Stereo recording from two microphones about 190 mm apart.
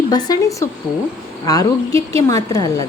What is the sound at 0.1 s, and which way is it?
A woman's voice, 20° left (ahead or behind).